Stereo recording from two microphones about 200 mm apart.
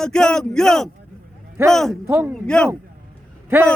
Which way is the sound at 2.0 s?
10° right (ahead or behind).